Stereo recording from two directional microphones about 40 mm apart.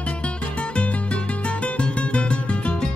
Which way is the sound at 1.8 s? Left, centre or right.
Left.